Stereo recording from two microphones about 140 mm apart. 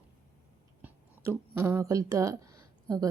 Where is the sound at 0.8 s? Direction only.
20° right (ahead or behind).